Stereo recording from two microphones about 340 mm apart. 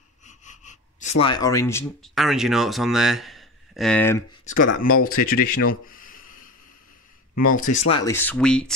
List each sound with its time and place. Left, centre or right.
0.2 s speech: left; by 4.2 s centre
5.0 s speech: left
7.4 s speech: left; by 8.7 s centre